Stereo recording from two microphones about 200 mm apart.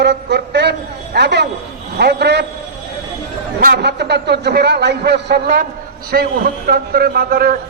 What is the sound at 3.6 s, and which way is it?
A man's voice, 50° right (ahead or behind).